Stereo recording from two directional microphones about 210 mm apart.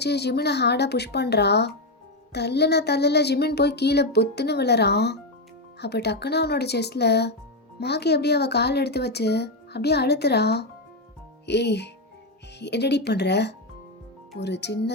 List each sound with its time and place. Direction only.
0.0 s speech: 50° left (ahead or behind)